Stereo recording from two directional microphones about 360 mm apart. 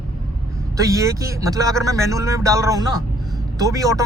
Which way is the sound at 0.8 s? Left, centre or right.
Centre.